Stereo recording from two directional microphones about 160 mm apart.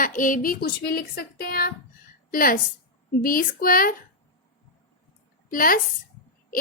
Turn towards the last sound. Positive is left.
turn(degrees=60)  # may be behind; listen again after turning